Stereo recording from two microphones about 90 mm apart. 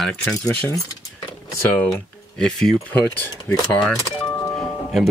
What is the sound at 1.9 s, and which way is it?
Speech, 5° left (ahead or behind).